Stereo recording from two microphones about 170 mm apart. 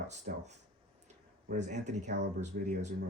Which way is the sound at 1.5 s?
45° right (ahead or behind).